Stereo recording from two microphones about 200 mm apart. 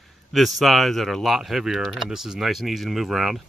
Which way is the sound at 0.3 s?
Centre (ahead or behind).